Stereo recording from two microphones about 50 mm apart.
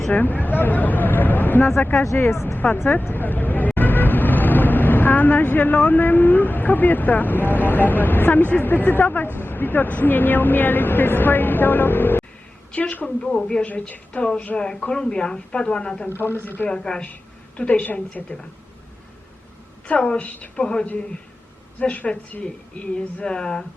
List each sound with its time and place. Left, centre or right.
0.1 s speech: left
12.7 s a woman's voice: left
16.0 s speech: left
16.6 s a woman's voice: centre
20.1 s speech: left